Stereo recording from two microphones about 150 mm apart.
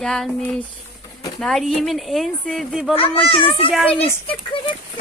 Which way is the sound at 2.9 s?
40° left (ahead or behind).